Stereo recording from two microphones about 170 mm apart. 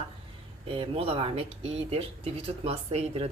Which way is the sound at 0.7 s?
35° right (ahead or behind).